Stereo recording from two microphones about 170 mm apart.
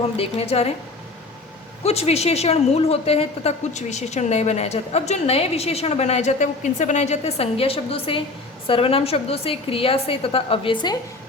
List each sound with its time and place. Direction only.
0.2 s a woman's voice: 35° left (ahead or behind)
1.8 s a woman's voice: 35° left (ahead or behind)